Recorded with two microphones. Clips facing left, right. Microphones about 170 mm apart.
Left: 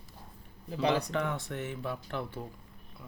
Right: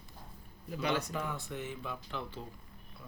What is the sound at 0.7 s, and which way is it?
Speech, 30° left (ahead or behind).